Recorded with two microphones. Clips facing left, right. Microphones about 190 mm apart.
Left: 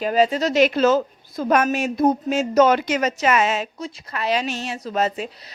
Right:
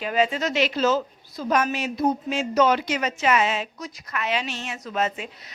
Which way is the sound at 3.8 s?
30° left (ahead or behind).